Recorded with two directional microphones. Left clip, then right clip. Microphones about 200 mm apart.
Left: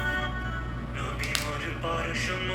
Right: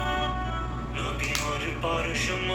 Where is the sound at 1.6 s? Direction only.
Centre (ahead or behind).